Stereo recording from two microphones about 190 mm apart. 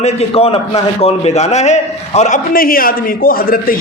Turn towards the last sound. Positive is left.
turn(degrees=50)  # may be behind; listen again after turning